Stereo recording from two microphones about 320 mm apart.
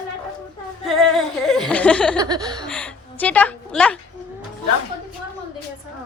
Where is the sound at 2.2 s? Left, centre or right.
Centre.